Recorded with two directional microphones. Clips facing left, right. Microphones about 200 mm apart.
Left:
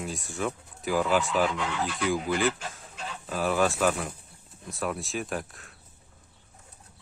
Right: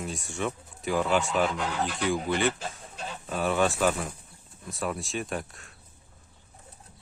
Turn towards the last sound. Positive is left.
turn(degrees=0)  # may be behind; listen again after turning